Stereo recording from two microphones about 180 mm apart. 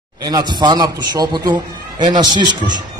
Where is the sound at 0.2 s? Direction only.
20° right (ahead or behind).